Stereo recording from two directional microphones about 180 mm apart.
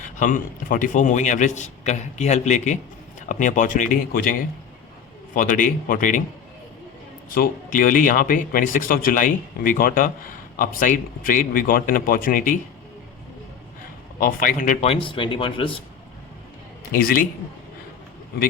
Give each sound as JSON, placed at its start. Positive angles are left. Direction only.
{"t": 0.0, "sound": "a man's voice", "side_deg": 45}
{"t": 7.3, "sound": "a man's voice", "side_deg": 50}
{"t": 14.2, "sound": "speech", "side_deg": 50}
{"t": 16.9, "sound": "a man's voice", "side_deg": 55}